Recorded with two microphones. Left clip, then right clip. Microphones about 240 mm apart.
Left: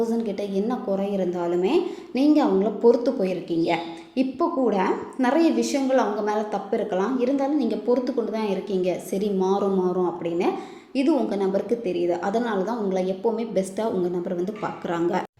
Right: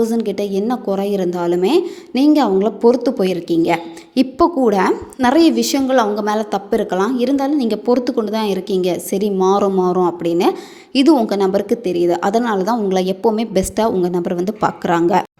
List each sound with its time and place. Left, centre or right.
0.0 s a woman's voice: right